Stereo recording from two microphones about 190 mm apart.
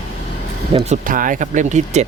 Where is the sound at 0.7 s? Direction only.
35° right (ahead or behind).